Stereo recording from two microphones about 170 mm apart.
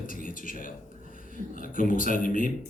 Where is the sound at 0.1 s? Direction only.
55° left (ahead or behind).